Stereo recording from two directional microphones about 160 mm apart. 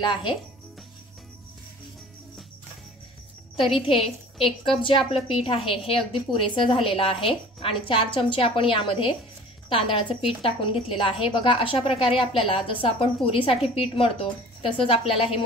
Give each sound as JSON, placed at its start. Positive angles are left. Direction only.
{"t": 0.0, "sound": "speech", "side_deg": 30}
{"t": 4.6, "sound": "a woman's voice", "side_deg": 35}